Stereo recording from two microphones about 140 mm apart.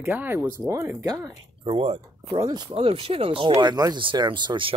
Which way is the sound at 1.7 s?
40° right (ahead or behind).